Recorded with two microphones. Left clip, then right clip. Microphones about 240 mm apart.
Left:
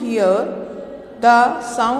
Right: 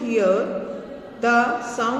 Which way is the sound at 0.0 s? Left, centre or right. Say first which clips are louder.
Left 3 dB; left.